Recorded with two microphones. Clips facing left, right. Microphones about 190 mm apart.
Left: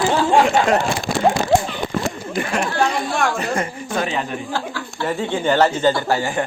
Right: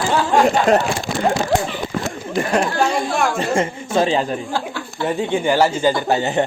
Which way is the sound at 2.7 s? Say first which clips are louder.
Right 1 dB; 5° right (ahead or behind).